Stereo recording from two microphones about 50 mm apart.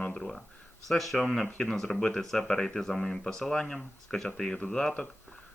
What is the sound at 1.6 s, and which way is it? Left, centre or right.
Speech, centre.